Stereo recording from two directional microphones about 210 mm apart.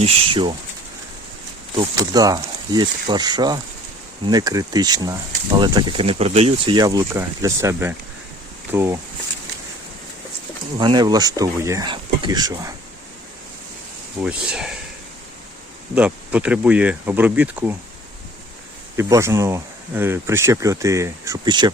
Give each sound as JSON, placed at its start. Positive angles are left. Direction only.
{"t": 0.0, "sound": "speech", "side_deg": -25}
{"t": 1.7, "sound": "speech", "side_deg": -20}
{"t": 10.8, "sound": "speech", "side_deg": -20}
{"t": 14.2, "sound": "speech", "side_deg": -5}
{"t": 16.0, "sound": "speech", "side_deg": -5}
{"t": 18.9, "sound": "speech", "side_deg": -15}